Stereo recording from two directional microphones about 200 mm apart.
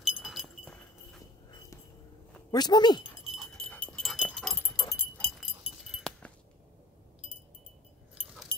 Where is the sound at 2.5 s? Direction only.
20° left (ahead or behind).